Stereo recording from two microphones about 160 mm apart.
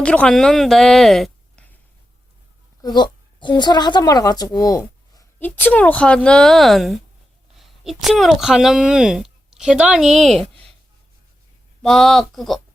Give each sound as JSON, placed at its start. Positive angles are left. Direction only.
{"t": 0.0, "sound": "a woman's voice", "side_deg": 5}
{"t": 2.8, "sound": "a woman's voice", "side_deg": 25}
{"t": 5.4, "sound": "a woman's voice", "side_deg": 10}
{"t": 11.8, "sound": "a woman's voice", "side_deg": 0}